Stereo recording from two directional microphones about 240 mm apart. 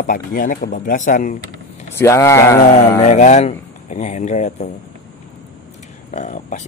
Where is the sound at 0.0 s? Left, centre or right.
Left.